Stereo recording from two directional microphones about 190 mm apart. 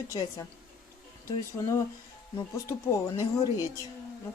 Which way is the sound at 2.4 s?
15° left (ahead or behind).